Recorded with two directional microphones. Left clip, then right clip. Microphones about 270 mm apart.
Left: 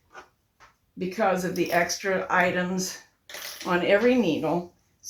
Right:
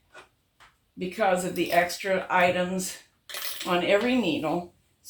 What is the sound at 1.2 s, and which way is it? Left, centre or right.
Speech, centre.